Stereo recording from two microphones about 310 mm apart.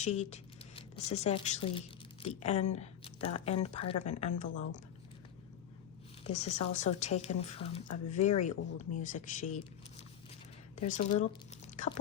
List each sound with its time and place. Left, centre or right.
0.0 s speech: left
6.2 s speech: left
10.8 s speech: left